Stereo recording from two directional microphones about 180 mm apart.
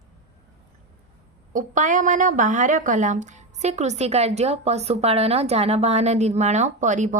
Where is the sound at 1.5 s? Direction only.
45° right (ahead or behind).